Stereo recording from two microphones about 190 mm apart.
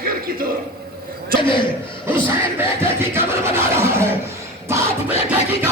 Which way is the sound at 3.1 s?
10° right (ahead or behind).